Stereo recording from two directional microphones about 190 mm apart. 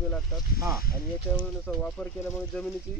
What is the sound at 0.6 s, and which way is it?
Speech, 15° right (ahead or behind).